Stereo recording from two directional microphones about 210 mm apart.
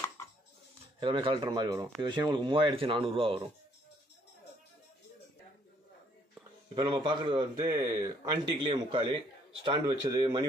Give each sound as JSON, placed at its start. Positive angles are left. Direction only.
{"t": 0.9, "sound": "a man's voice", "side_deg": -25}
{"t": 6.7, "sound": "a man's voice", "side_deg": -20}